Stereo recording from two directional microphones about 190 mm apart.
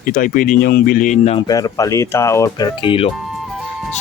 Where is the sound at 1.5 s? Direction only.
20° left (ahead or behind).